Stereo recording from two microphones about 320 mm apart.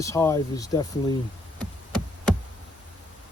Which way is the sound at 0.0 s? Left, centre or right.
Centre.